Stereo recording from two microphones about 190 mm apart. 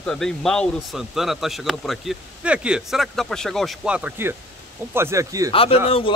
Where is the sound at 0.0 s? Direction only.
Centre (ahead or behind); by 5.5 s 15° right (ahead or behind).